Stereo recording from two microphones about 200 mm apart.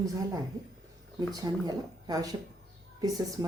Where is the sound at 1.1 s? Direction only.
20° right (ahead or behind).